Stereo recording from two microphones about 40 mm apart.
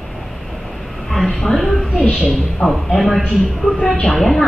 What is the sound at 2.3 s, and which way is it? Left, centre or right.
Speech, centre.